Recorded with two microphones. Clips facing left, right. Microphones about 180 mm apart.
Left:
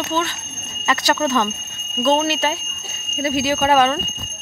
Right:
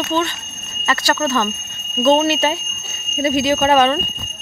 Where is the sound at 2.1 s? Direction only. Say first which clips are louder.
Right 4 dB; centre (ahead or behind).